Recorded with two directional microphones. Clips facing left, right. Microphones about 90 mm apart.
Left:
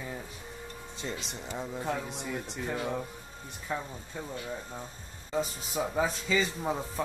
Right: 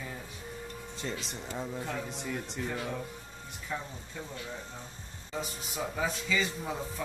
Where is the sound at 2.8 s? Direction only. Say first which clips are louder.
Left 3 dB; 25° left (ahead or behind).